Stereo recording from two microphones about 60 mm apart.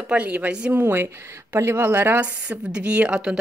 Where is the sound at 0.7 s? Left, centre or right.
Right.